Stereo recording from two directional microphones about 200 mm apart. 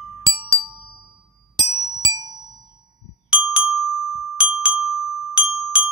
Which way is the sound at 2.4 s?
20° right (ahead or behind).